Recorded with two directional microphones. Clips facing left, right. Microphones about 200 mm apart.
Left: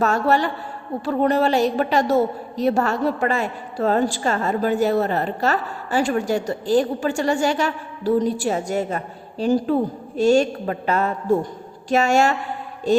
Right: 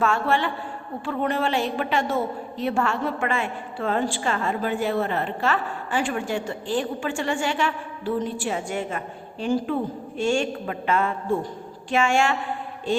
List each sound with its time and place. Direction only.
0.0 s a woman's voice: 40° left (ahead or behind)